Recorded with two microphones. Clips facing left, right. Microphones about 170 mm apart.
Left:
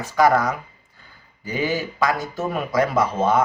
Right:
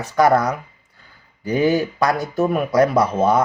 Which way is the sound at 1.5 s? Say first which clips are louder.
Right 7 dB; 60° right (ahead or behind).